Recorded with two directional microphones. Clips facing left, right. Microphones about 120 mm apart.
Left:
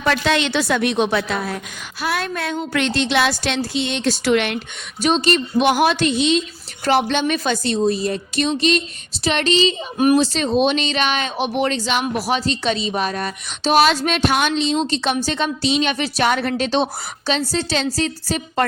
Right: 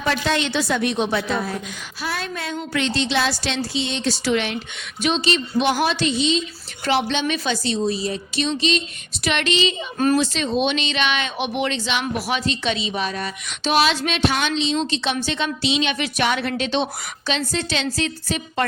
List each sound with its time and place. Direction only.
0.0 s a woman's voice: 75° left (ahead or behind)
5.0 s a woman's voice: 45° left (ahead or behind)
6.8 s a woman's voice: 50° left (ahead or behind)
9.2 s speech: 35° left (ahead or behind)